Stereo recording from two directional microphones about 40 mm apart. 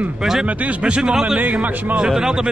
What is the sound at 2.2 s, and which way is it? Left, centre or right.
Speech, centre.